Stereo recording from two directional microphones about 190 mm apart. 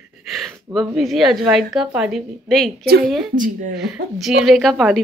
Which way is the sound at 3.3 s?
45° right (ahead or behind).